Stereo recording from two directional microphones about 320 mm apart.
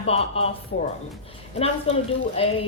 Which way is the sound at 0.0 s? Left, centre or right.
Centre.